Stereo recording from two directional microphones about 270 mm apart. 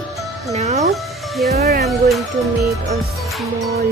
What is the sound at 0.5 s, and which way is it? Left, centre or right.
Music, right.